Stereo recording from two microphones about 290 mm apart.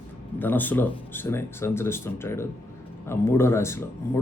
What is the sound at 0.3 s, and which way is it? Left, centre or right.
Speech, centre.